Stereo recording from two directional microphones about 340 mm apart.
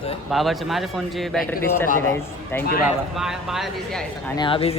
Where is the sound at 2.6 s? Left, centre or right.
Left.